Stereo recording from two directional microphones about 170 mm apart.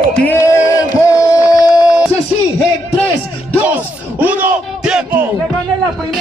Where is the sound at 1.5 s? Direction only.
20° left (ahead or behind).